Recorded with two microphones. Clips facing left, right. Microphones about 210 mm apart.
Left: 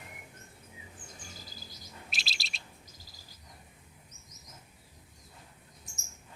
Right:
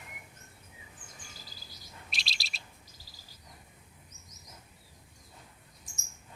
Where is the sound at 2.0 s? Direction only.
Centre (ahead or behind).